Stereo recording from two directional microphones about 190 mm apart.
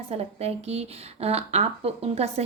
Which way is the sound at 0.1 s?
30° right (ahead or behind).